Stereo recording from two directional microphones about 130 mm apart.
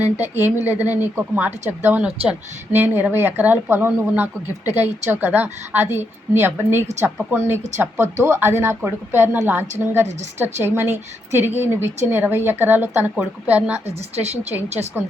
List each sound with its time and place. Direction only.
0.0 s speech: 15° right (ahead or behind)
13.8 s a woman's voice: 55° right (ahead or behind)